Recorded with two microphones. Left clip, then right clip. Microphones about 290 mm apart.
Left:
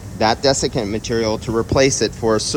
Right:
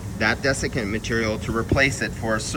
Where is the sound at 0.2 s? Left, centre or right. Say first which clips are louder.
Left 6 dB; centre.